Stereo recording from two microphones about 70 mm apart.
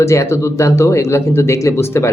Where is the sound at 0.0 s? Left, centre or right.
Left.